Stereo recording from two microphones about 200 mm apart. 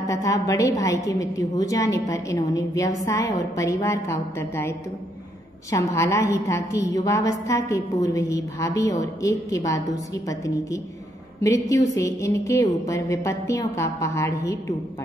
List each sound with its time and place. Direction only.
0.0 s a woman's voice: 15° left (ahead or behind)